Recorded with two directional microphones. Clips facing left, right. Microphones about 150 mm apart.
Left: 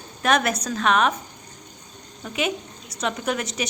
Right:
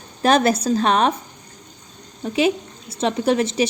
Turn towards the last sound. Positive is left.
turn(degrees=-30)  # may be behind; listen again after turning